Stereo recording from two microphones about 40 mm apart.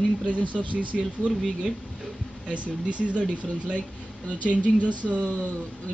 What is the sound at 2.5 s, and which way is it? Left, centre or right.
Speech, right.